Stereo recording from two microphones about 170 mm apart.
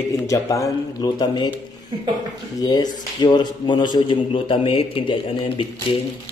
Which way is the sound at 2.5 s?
20° left (ahead or behind).